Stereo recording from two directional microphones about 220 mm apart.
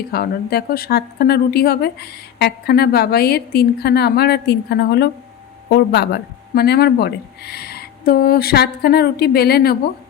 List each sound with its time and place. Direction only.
0.1 s speech: 45° left (ahead or behind)